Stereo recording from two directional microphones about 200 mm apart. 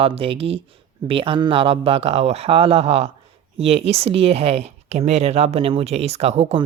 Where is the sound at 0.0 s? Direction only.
30° right (ahead or behind).